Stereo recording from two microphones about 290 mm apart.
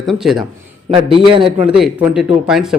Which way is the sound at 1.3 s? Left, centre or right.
Centre.